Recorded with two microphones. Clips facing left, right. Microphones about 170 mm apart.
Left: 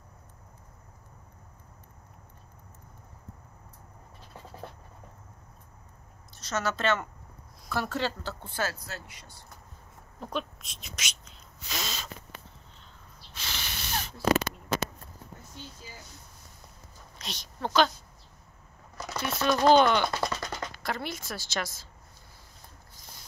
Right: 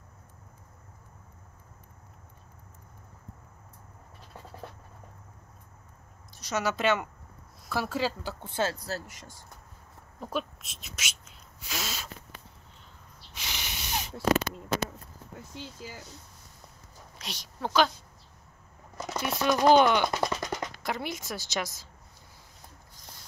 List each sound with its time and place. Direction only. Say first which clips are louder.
6.4 s speech: right 1 dB; 15° right (ahead or behind); by 9.3 s 45° right (ahead or behind)
10.2 s speech: right 1 dB; 5° right (ahead or behind)
13.3 s a sound: even; 15° right (ahead or behind)
15.5 s speech: right 6 dB; 85° right
17.2 s a woman's voice: even; 10° right (ahead or behind)
18.9 s speech: right 1 dB; 20° right (ahead or behind)